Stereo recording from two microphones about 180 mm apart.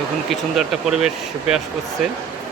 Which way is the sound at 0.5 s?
Centre (ahead or behind).